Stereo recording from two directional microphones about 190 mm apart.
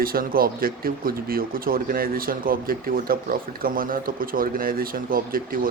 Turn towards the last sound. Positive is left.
turn(degrees=-50)  # may be behind; listen again after turning